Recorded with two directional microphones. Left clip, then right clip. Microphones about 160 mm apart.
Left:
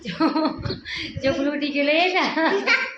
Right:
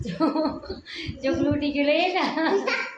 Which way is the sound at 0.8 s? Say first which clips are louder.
Left 4 dB; 35° left (ahead or behind).